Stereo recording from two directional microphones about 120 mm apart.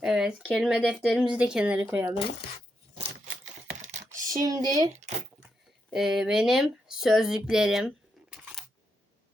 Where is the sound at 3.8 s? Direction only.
75° right (ahead or behind).